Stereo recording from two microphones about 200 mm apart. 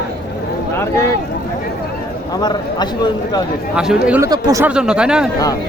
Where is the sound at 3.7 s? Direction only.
5° right (ahead or behind).